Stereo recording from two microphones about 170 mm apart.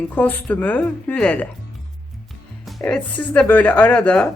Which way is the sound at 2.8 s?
10° left (ahead or behind).